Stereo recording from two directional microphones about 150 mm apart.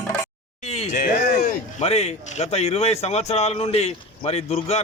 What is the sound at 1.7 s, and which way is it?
Speech, 45° left (ahead or behind).